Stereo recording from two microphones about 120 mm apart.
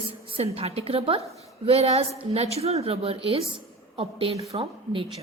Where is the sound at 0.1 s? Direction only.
50° right (ahead or behind).